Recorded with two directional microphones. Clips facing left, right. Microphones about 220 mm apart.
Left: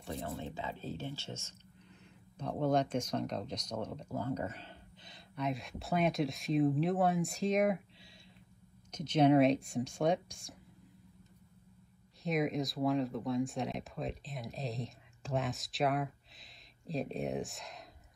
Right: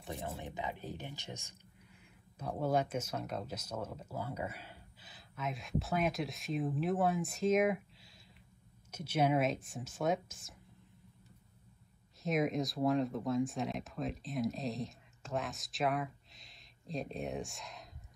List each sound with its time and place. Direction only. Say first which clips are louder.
0.1 s speech: left 2 dB; 15° right (ahead or behind)
12.2 s speech: even; centre (ahead or behind)